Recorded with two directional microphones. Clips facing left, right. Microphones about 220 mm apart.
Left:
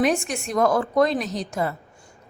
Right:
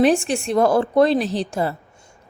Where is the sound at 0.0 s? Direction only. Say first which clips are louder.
Right 5 dB; 30° right (ahead or behind).